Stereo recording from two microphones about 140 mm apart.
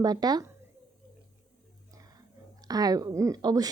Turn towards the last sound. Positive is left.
turn(degrees=-25)  # may be behind; listen again after turning